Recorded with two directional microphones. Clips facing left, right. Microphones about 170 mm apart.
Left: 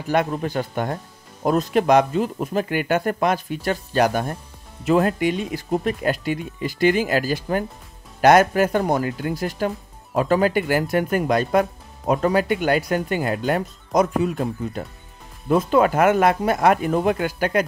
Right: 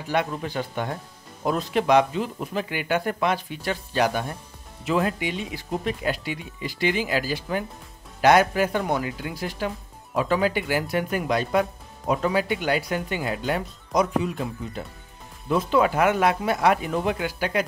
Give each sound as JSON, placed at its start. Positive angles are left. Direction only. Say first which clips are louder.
{"t": 0.1, "sound": "speech", "louder": "left 4 dB", "side_deg": 45}